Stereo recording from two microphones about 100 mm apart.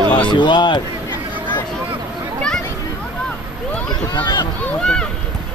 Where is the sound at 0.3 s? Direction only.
50° left (ahead or behind).